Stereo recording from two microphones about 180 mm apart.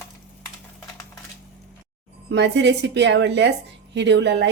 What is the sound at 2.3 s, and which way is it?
A woman's voice, 75° right (ahead or behind).